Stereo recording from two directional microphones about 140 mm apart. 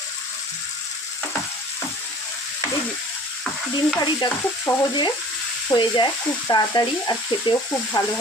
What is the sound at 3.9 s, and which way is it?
Stir, 35° left (ahead or behind).